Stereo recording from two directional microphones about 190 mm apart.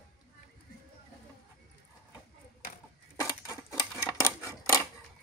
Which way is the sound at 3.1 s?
15° left (ahead or behind).